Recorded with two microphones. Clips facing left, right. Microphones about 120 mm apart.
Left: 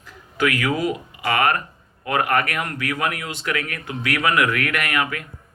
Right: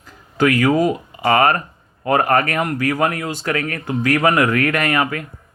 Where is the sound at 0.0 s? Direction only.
35° right (ahead or behind).